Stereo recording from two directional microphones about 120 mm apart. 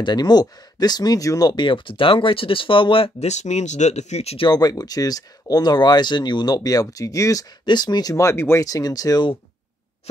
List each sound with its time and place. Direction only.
0.0 s speech: 35° left (ahead or behind)
3.3 s speech: 70° left (ahead or behind)
4.5 s speech: 35° left (ahead or behind)